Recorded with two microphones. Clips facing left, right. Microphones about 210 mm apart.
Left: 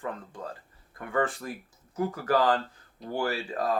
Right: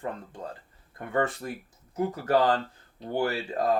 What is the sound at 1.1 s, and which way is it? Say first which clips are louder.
Speech: right 1 dB; 25° right (ahead or behind).